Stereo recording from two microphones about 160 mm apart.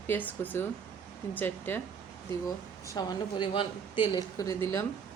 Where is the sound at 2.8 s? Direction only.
25° left (ahead or behind).